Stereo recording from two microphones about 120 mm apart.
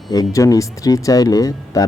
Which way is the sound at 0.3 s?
25° left (ahead or behind).